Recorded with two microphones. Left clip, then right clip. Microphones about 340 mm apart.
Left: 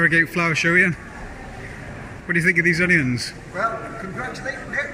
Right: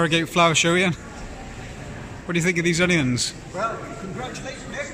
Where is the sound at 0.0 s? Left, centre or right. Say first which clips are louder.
Left 1 dB; centre.